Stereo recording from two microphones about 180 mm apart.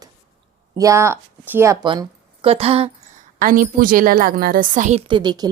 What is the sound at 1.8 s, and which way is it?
Speech, 25° right (ahead or behind).